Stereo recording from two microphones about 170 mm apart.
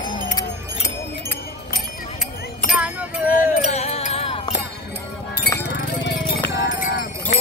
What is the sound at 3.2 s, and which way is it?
Music, 50° left (ahead or behind).